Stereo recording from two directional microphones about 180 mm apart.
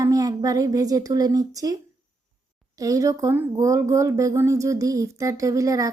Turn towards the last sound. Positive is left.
turn(degrees=-20)  # may be behind; listen again after turning